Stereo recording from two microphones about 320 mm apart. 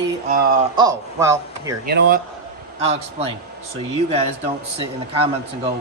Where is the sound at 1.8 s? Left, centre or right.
Right.